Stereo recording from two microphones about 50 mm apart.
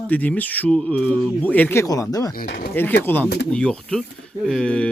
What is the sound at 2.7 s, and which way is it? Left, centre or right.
Speech, left.